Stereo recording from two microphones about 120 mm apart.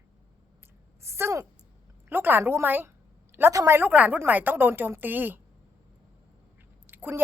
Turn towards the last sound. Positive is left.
turn(degrees=-15)  # may be behind; listen again after turning